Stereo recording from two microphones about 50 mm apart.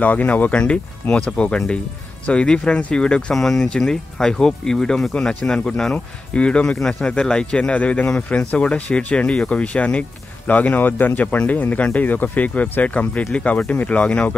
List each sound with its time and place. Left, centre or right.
0.0 s speech: left
0.6 s speech: left
3.3 s speech: centre
6.3 s speech: left
7.7 s speech: left